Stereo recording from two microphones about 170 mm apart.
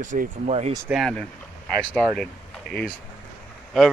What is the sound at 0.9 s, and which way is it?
Speech, centre (ahead or behind).